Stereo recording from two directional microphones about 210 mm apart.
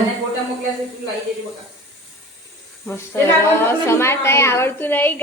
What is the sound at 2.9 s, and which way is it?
A woman's voice, 10° left (ahead or behind).